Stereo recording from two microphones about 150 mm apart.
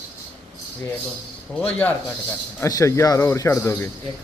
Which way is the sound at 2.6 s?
20° left (ahead or behind).